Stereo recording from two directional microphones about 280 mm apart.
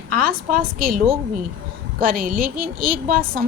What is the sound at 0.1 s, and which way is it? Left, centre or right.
A woman's voice, right.